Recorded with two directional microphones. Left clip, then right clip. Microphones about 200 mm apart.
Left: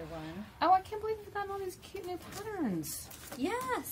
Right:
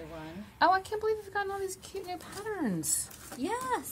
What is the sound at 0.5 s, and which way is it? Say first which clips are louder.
Speech: right 1 dB; 50° right (ahead or behind).